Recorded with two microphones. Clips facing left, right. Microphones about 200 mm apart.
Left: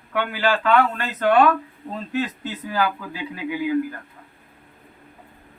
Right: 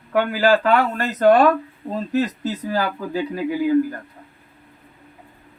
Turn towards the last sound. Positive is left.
turn(degrees=-40)  # may be behind; listen again after turning